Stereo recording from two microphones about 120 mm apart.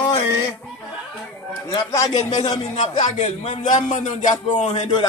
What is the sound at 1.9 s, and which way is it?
Speech, 30° left (ahead or behind).